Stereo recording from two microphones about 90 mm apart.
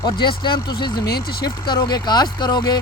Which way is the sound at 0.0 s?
60° left (ahead or behind).